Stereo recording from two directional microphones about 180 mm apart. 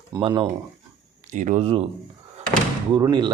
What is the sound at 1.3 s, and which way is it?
Speech, 45° right (ahead or behind).